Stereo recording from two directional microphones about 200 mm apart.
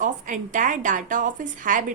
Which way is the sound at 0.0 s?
40° right (ahead or behind).